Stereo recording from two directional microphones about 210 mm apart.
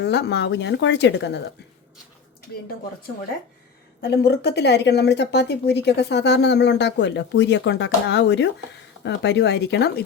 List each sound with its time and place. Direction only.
0.0 s speech: 55° left (ahead or behind)
4.0 s speech: 50° left (ahead or behind)